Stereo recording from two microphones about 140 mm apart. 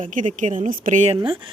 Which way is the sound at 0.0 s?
70° right (ahead or behind).